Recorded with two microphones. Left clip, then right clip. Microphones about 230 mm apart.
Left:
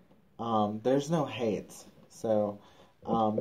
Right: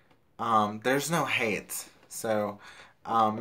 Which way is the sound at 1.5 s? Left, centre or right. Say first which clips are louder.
Right 3 dB; right.